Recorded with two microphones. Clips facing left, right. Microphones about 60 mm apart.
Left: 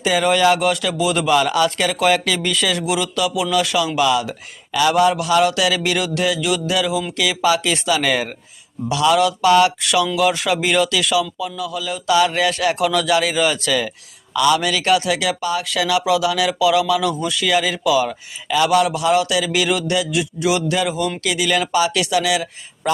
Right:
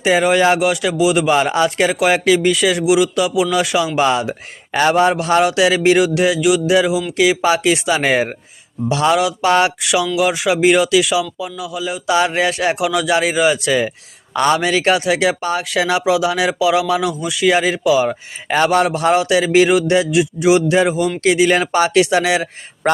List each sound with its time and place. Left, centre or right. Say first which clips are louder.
0.0 s speech: right 2 dB; right
1.3 s speech: right 1 dB; right
9.8 s speech: right 1 dB; centre
12.8 s speech: left 2 dB; centre
13.1 s speech: right 3 dB; right
14.3 s speech: right 2 dB; right
18.4 s speech: right 2 dB; right
19.1 s speech: right 5 dB; right